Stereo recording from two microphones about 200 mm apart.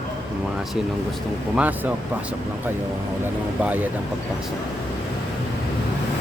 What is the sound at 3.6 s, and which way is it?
Speech, 10° right (ahead or behind).